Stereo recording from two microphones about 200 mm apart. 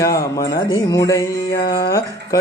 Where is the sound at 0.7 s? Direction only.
20° left (ahead or behind).